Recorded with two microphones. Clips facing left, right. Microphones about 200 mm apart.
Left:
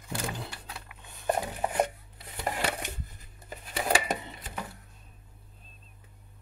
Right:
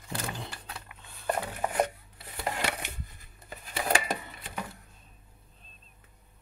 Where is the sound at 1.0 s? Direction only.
20° left (ahead or behind).